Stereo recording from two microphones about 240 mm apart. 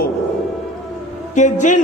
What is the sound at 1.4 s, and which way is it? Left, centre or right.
Speech, left.